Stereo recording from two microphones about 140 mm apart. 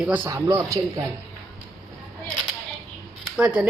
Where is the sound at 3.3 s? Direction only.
5° right (ahead or behind).